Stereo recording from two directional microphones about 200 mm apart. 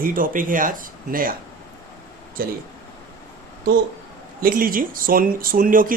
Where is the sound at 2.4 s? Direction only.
45° right (ahead or behind).